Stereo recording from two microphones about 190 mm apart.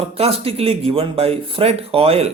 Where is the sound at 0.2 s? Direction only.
30° right (ahead or behind).